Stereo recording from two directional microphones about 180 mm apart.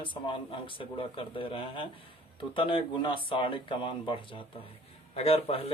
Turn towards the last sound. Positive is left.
turn(degrees=35)  # may be behind; listen again after turning